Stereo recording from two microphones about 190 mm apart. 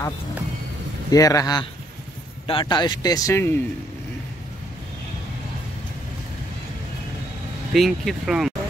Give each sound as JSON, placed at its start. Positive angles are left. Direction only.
{"t": 1.1, "sound": "speech", "side_deg": 20}
{"t": 7.7, "sound": "speech", "side_deg": 0}